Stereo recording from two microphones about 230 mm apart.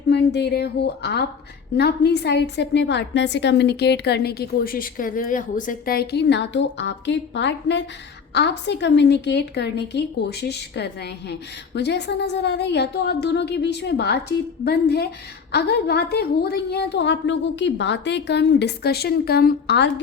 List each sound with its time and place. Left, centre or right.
0.1 s a woman's voice: left